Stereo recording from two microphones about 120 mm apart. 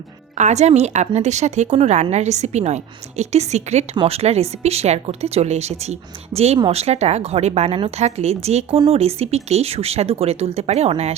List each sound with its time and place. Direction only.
0.3 s a woman's voice: 75° right (ahead or behind)